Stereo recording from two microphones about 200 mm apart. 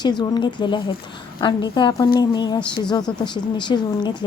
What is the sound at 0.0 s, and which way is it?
Speech, 20° left (ahead or behind).